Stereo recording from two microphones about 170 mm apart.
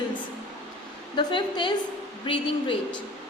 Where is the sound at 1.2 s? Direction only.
25° left (ahead or behind).